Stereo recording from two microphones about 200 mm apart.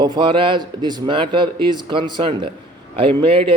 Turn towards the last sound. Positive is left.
turn(degrees=-25)  # may be behind; listen again after turning